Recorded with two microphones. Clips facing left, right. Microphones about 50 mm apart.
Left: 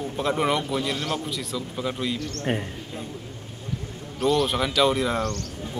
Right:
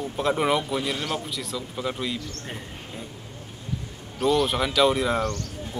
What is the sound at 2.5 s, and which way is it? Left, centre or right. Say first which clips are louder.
Speech: left 12 dB; left.